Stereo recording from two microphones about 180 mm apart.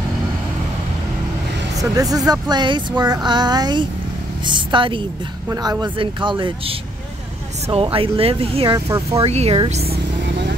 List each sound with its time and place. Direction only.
1.8 s speech: 20° right (ahead or behind)
7.7 s speech: 30° right (ahead or behind)
8.7 s speech: 15° right (ahead or behind)
9.2 s speech: 35° right (ahead or behind)